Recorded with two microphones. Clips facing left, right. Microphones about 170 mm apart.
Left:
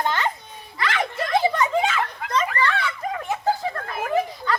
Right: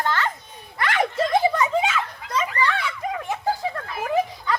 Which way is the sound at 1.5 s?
5° right (ahead or behind).